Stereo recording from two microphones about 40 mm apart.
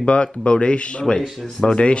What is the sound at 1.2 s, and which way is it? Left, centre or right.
Speech, centre.